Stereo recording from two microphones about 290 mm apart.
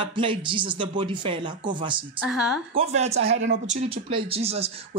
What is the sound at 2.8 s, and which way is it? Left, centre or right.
Speech, right.